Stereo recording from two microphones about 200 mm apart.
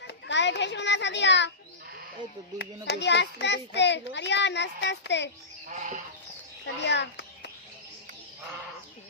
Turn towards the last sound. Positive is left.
turn(degrees=60)  # may be behind; listen again after turning